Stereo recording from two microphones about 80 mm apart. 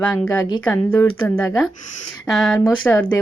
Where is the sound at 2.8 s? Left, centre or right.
Centre.